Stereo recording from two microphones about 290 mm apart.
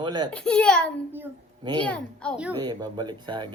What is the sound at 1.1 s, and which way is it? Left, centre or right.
Speech, centre.